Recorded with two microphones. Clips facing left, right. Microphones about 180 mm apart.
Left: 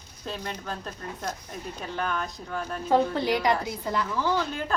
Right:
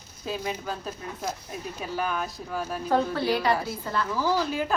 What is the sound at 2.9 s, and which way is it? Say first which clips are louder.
A woman's voice: left 1 dB; 15° left (ahead or behind).